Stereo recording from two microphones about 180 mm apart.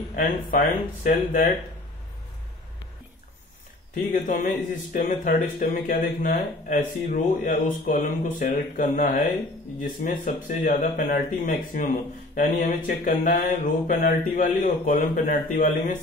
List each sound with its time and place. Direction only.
0.1 s mantra: 50° left (ahead or behind)
3.9 s mantra: 45° left (ahead or behind)
5.6 s mantra: 55° left (ahead or behind)